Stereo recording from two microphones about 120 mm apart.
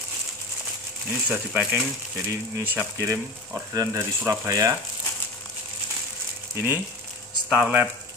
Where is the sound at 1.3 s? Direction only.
10° right (ahead or behind).